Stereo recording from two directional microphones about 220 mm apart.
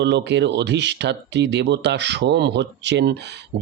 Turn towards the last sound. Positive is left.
turn(degrees=-50)  # may be behind; listen again after turning